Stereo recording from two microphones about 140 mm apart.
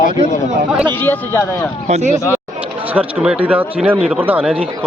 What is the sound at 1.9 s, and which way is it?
Speech, 55° right (ahead or behind).